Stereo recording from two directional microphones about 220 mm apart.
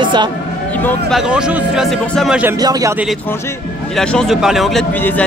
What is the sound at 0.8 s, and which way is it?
Speech, centre (ahead or behind).